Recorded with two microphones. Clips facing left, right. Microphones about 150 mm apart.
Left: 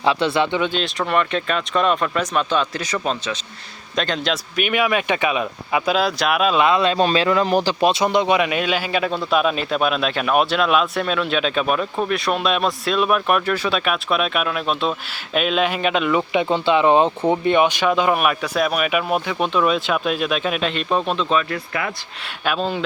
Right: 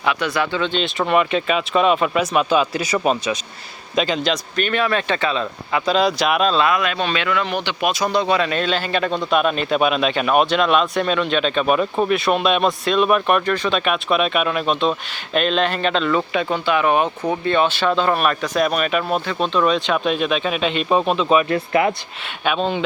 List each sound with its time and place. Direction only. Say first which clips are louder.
0.0 s speech: left 2 dB; 30° left (ahead or behind)
0.6 s speech: right 1 dB; 5° left (ahead or behind)
4.5 s speech: left 2 dB; 10° left (ahead or behind)
6.5 s speech: left 2 dB; 20° left (ahead or behind); by 21.4 s 10° right (ahead or behind)
21.5 s speech: right 8 dB; 30° right (ahead or behind)
22.4 s speech: right 2 dB; centre (ahead or behind)